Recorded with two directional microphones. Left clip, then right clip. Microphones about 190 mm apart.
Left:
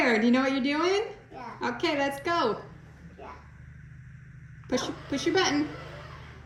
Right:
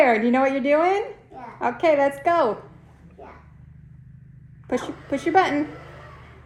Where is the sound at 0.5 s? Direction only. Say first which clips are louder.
Right 7 dB; 15° right (ahead or behind).